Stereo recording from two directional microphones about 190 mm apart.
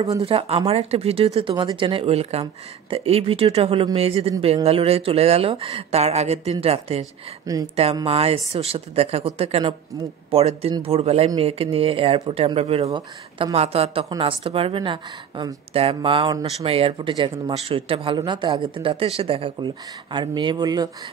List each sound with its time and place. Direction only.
0.2 s a woman's voice: 30° right (ahead or behind)